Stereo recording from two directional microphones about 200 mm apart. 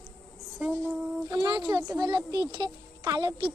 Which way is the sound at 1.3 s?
20° right (ahead or behind).